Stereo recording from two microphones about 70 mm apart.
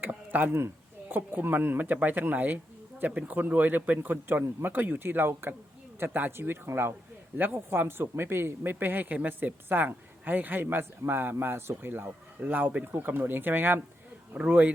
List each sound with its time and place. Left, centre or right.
0.0 s a sound: right
0.5 s speech: right
14.3 s speech: centre